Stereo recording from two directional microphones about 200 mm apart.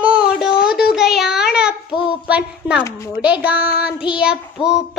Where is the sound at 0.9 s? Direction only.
Centre (ahead or behind).